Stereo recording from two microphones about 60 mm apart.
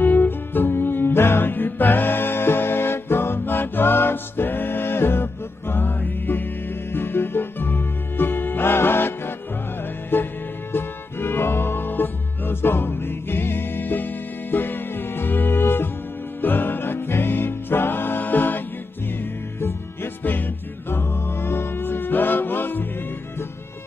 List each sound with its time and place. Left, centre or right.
0.0 s music: left
20.9 s music: left